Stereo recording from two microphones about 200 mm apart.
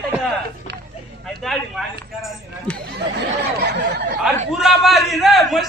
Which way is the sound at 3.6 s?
55° right (ahead or behind).